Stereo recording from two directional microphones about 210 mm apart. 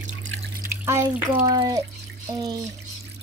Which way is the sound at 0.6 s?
10° right (ahead or behind).